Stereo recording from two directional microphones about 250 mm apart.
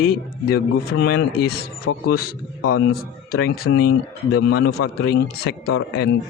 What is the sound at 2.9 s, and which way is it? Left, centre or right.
Speech, left.